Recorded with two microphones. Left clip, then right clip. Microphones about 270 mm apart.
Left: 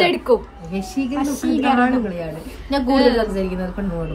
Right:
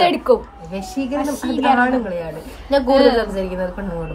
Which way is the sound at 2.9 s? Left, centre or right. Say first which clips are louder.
Right 2 dB; centre.